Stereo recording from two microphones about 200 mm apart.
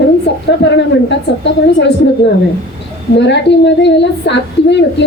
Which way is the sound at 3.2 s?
60° left (ahead or behind).